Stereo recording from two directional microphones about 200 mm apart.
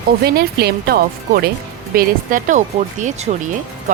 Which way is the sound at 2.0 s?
40° right (ahead or behind).